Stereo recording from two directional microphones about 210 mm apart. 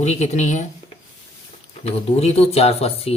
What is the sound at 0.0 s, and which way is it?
Speech, 30° left (ahead or behind).